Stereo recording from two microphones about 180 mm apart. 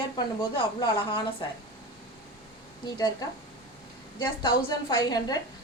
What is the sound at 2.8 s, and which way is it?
Speech, 20° left (ahead or behind).